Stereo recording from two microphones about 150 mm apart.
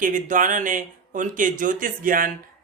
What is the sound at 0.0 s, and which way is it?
Speech, 60° right (ahead or behind).